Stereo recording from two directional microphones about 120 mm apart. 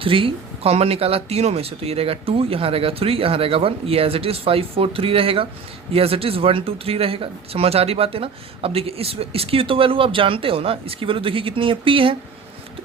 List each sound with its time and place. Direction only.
0.0 s speech: 50° right (ahead or behind)